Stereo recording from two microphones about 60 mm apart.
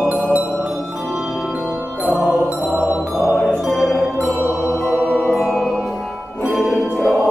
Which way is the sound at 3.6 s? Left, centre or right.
Centre.